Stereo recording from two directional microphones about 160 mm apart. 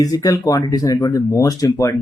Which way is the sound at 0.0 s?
25° left (ahead or behind).